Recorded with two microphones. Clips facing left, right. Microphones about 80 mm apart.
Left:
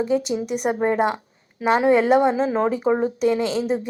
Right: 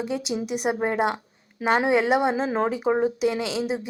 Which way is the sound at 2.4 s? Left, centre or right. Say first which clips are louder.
Left 3 dB; right.